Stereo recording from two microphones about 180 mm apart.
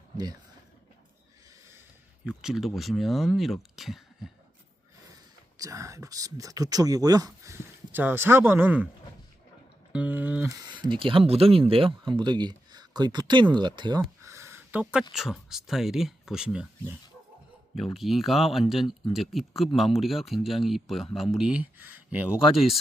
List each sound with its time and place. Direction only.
2.2 s speech: 5° right (ahead or behind)
5.5 s speech: 20° right (ahead or behind)
9.9 s speech: 10° right (ahead or behind)
10.6 s speech: 25° right (ahead or behind)
14.3 s a sound: 15° right (ahead or behind)
15.1 s speech: centre (ahead or behind)
17.9 s speech: centre (ahead or behind)